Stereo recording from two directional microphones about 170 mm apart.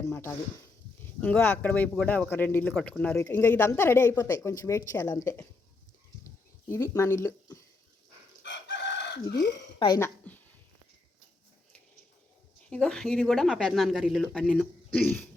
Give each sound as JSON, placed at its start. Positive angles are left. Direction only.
{"t": 1.0, "sound": "speech", "side_deg": 10}
{"t": 6.7, "sound": "speech", "side_deg": 15}
{"t": 8.4, "sound": "chicken", "side_deg": 90}
{"t": 9.7, "sound": "speech", "side_deg": 25}
{"t": 12.7, "sound": "speech", "side_deg": 5}